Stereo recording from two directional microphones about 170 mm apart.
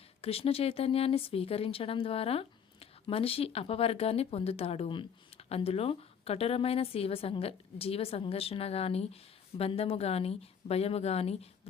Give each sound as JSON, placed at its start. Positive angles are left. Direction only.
{"t": 0.2, "sound": "a woman's voice", "side_deg": 35}